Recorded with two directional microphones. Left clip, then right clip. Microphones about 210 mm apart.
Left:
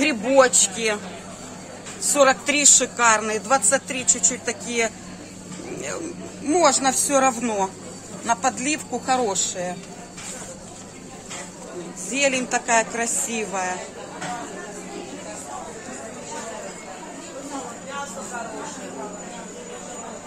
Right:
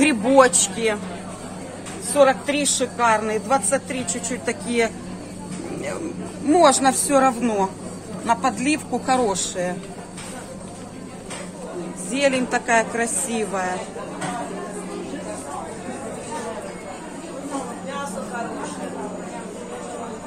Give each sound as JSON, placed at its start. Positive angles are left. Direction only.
{"t": 0.0, "sound": "a sound", "side_deg": 0}
{"t": 0.8, "sound": "a woman's voice", "side_deg": 15}
{"t": 2.1, "sound": "a woman's voice", "side_deg": 25}
{"t": 6.5, "sound": "a woman's voice", "side_deg": 0}
{"t": 12.1, "sound": "a woman's voice", "side_deg": 15}